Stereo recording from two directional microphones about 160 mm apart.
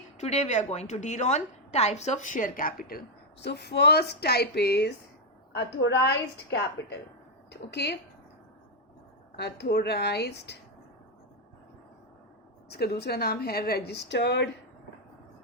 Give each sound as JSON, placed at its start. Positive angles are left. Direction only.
{"t": 0.2, "sound": "a woman's voice", "side_deg": 45}
{"t": 3.4, "sound": "speech", "side_deg": 90}
{"t": 9.3, "sound": "speech", "side_deg": 90}
{"t": 12.7, "sound": "speech", "side_deg": 90}